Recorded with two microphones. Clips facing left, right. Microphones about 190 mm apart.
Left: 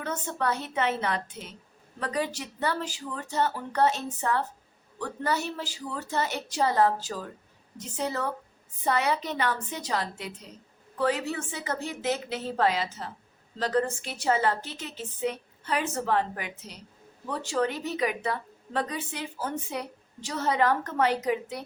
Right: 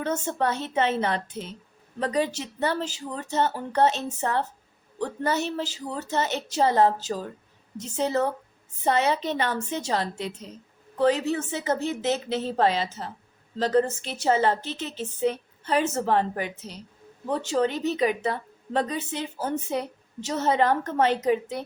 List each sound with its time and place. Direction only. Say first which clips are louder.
0.0 s a woman's voice: right 4 dB; 25° right (ahead or behind)